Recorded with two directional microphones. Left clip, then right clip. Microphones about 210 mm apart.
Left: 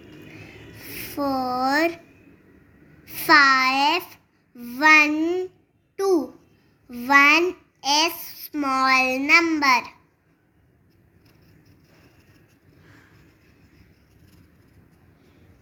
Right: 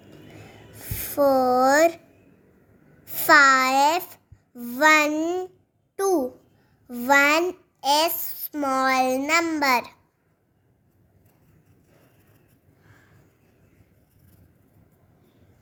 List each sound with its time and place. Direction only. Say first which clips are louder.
0.3 s a sound: left 3 dB; 50° right (ahead or behind)
3.0 s a child's voice: even; 50° right (ahead or behind)
6.8 s a child's voice: left 3 dB; 50° right (ahead or behind)